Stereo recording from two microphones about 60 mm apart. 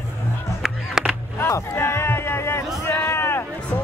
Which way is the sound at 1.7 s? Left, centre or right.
Left.